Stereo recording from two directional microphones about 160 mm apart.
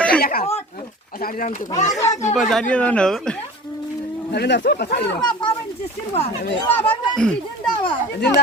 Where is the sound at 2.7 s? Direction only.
10° left (ahead or behind).